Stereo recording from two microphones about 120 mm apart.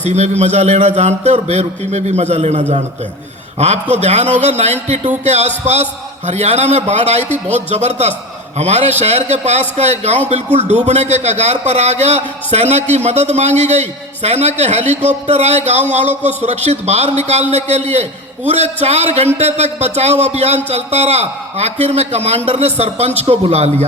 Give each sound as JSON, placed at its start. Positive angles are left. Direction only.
{"t": 0.0, "sound": "a man's voice", "side_deg": -70}
{"t": 3.9, "sound": "a man's voice", "side_deg": -65}